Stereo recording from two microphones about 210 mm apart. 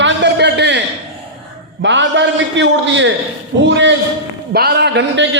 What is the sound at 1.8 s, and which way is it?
A man's voice, 60° right (ahead or behind).